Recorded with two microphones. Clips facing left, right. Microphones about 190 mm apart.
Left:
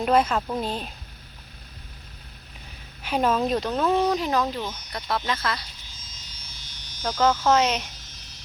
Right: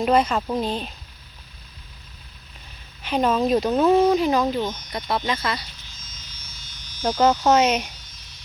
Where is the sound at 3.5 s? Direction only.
10° right (ahead or behind).